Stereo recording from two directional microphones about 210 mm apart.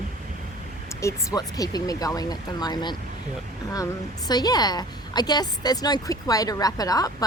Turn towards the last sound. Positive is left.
turn(degrees=15)  # may be behind; listen again after turning